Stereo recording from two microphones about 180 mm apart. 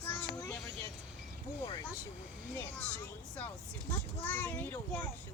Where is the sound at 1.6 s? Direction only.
25° left (ahead or behind).